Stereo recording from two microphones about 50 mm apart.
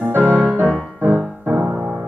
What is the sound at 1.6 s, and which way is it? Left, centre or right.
Music, centre.